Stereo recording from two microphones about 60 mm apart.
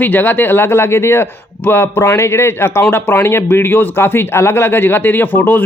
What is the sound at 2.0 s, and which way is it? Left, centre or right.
A man's voice, left.